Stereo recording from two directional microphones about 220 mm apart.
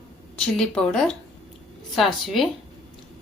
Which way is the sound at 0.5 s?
5° left (ahead or behind).